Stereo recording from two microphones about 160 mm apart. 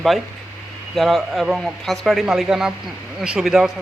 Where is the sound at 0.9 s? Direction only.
Centre (ahead or behind).